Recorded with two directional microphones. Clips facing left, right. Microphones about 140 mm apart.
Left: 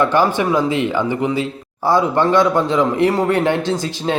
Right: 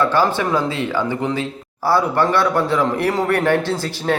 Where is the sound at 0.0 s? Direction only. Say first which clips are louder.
Left 2 dB; 15° left (ahead or behind).